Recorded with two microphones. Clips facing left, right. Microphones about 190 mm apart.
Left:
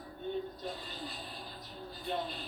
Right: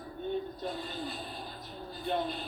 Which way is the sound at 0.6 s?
55° right (ahead or behind).